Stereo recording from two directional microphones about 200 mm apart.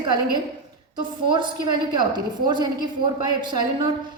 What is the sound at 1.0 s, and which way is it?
A woman's voice, 20° right (ahead or behind).